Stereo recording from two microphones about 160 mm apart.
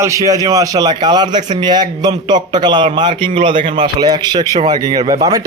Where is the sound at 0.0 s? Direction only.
20° right (ahead or behind).